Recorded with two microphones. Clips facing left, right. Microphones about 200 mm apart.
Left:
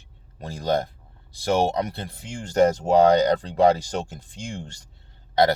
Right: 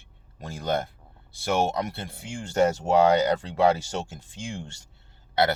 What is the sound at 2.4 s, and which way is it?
Speech, 40° left (ahead or behind).